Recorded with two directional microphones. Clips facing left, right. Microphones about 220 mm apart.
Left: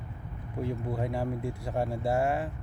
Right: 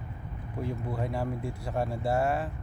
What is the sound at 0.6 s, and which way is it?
Speech, 15° left (ahead or behind).